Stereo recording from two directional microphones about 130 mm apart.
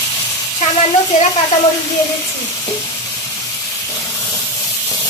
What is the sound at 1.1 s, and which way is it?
Speech, 70° left (ahead or behind).